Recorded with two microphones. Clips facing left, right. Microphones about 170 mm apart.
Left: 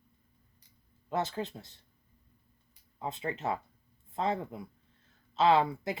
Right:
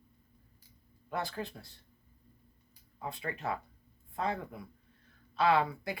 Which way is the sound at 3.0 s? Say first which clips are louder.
Left 3 dB; 20° left (ahead or behind).